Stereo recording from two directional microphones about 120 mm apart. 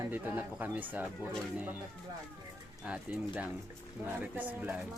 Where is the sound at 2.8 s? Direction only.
10° right (ahead or behind).